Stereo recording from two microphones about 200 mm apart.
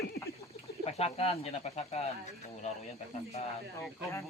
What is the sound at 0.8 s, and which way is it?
Speech, 30° left (ahead or behind).